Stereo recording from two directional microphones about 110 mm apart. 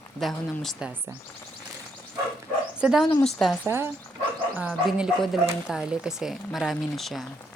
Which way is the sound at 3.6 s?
20° right (ahead or behind).